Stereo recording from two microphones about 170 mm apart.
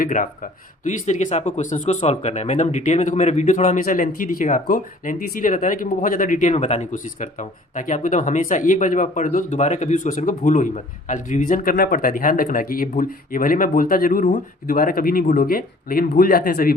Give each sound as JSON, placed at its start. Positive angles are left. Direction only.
{"t": 0.0, "sound": "speech", "side_deg": 50}